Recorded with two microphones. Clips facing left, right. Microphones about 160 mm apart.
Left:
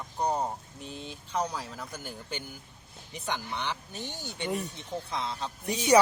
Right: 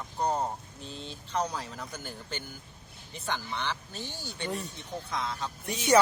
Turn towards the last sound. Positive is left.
turn(degrees=15)  # may be behind; listen again after turning